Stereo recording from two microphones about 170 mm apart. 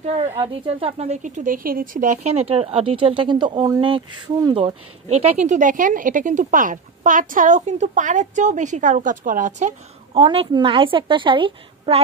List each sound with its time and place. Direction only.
0.4 s a woman's voice: 35° right (ahead or behind)
5.1 s speech: 40° right (ahead or behind)
10.2 s a woman's voice: 30° right (ahead or behind)